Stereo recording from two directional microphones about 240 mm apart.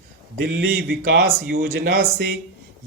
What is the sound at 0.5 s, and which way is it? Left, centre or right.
Speech, right.